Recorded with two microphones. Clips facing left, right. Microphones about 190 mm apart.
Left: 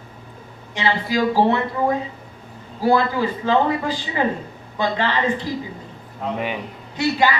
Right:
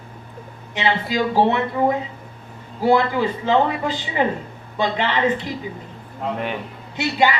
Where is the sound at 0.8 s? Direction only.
20° right (ahead or behind).